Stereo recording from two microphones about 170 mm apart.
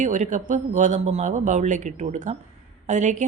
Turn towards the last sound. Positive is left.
turn(degrees=-45)  # may be behind; listen again after turning